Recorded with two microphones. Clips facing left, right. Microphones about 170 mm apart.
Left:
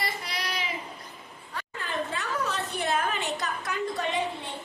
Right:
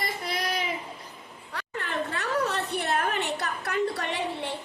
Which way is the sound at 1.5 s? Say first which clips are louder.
Right 1 dB; 70° right (ahead or behind).